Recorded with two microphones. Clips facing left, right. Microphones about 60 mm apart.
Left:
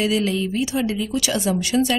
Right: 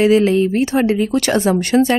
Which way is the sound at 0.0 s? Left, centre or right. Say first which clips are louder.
Right 9 dB; right.